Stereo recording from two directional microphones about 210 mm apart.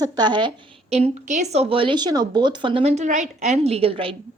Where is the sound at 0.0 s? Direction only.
20° right (ahead or behind).